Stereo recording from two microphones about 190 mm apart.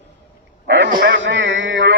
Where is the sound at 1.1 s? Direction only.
80° right.